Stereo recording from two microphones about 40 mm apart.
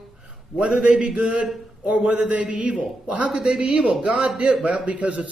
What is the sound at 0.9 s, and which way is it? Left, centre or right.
Speech, right.